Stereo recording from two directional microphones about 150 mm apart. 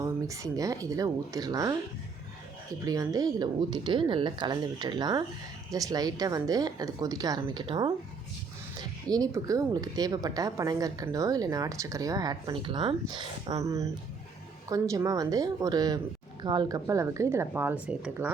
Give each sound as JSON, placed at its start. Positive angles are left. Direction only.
{"t": 0.0, "sound": "a woman's voice", "side_deg": -20}
{"t": 2.8, "sound": "a woman's voice", "side_deg": -25}
{"t": 9.0, "sound": "a woman's voice", "side_deg": -25}